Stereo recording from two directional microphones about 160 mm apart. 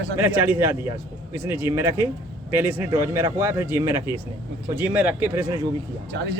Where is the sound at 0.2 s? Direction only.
10° right (ahead or behind).